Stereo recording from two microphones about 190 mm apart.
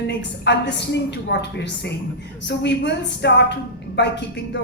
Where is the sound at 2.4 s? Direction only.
65° left (ahead or behind).